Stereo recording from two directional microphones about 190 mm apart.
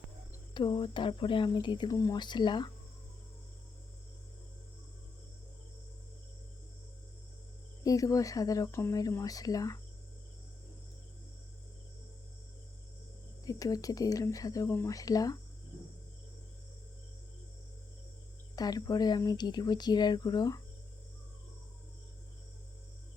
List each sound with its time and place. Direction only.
0.5 s speech: 25° left (ahead or behind)
7.9 s speech: 20° left (ahead or behind)
13.4 s speech: 20° left (ahead or behind)
18.5 s speech: 20° left (ahead or behind)